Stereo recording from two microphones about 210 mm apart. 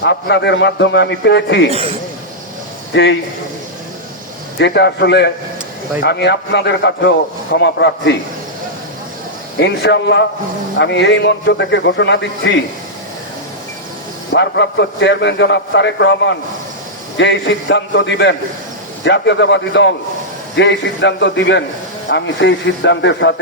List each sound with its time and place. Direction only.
0.0 s a man's voice: 60° left (ahead or behind)
1.7 s speech: 25° right (ahead or behind)
2.9 s a man's voice: 60° left (ahead or behind)
4.5 s a man's voice: 55° left (ahead or behind)
9.6 s a man's voice: 55° left (ahead or behind)
14.3 s a man's voice: 55° left (ahead or behind)